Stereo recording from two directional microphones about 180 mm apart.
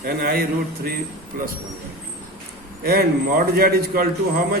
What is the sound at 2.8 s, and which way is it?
A man's voice, 60° right (ahead or behind).